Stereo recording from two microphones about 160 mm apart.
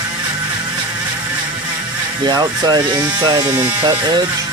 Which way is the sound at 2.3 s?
25° right (ahead or behind).